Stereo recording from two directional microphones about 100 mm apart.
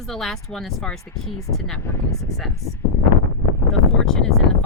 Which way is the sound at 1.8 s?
25° left (ahead or behind).